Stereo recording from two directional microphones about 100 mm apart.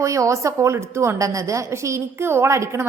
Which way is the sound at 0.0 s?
30° right (ahead or behind).